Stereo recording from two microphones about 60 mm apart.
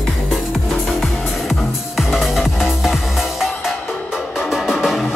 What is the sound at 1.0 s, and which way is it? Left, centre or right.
Music, centre.